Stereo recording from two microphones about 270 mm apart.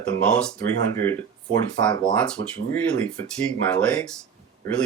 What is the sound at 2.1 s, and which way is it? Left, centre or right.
Speech, centre.